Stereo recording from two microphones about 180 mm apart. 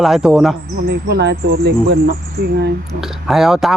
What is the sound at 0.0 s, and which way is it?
Speech, centre (ahead or behind).